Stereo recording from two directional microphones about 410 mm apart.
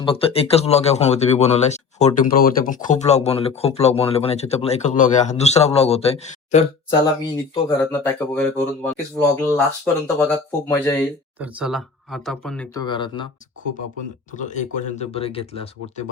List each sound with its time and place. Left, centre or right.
0.0 s speech: centre
14.3 s speech: centre